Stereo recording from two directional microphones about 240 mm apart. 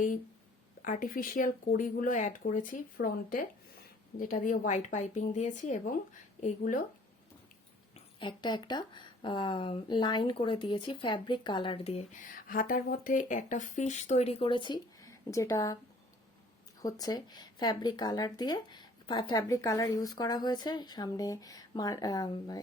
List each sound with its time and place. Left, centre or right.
0.8 s speech: left
7.9 s speech: centre
16.8 s speech: centre